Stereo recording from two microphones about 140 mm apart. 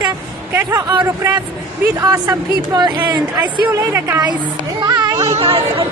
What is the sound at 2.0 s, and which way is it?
Speech, 25° right (ahead or behind).